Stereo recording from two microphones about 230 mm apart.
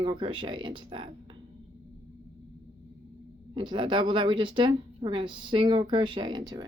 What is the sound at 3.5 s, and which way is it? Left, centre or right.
Speech, right.